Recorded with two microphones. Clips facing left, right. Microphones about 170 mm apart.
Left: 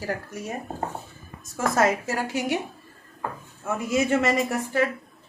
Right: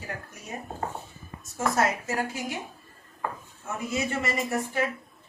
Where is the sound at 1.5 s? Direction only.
90° left; by 2.6 s 75° left (ahead or behind).